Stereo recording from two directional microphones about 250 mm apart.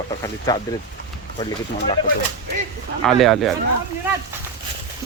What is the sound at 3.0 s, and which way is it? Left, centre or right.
Speech, centre.